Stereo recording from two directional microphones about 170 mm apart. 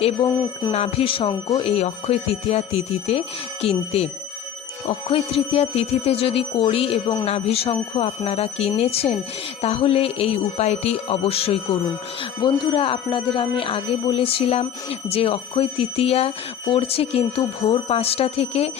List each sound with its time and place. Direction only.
0.0 s speech: 25° left (ahead or behind)
0.7 s speech: 35° left (ahead or behind)
1.6 s speech: 35° left (ahead or behind)